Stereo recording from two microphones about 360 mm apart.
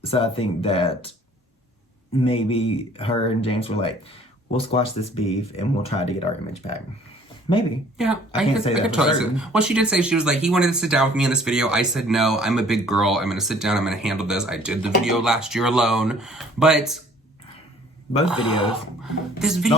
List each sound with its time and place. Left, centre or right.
0.0 s speech: centre
2.1 s speech: centre
7.9 s speech: centre
18.5 s speech: centre
19.4 s speech: centre